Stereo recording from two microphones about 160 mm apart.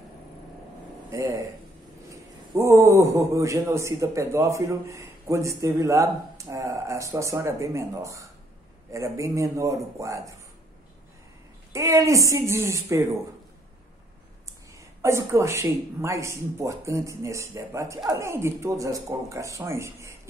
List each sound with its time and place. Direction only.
2.0 s a man's voice: 20° right (ahead or behind)
11.7 s a man's voice: 20° right (ahead or behind)
15.0 s a man's voice: 20° right (ahead or behind)